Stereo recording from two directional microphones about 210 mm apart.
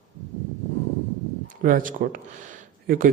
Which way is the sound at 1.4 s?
40° right (ahead or behind).